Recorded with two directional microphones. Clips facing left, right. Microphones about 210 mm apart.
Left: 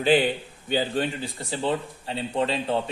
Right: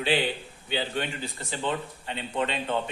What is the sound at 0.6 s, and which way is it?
A man's voice, 40° left (ahead or behind).